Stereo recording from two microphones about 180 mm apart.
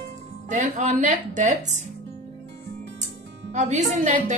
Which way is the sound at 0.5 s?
45° right (ahead or behind).